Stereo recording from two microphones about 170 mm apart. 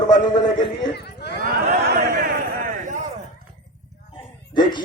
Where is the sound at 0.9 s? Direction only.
75° left (ahead or behind).